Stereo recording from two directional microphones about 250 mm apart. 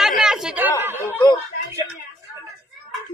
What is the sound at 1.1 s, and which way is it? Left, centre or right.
Speech, centre.